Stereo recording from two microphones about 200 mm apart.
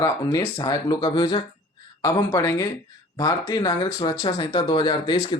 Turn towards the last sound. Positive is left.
turn(degrees=20)  # may be behind; listen again after turning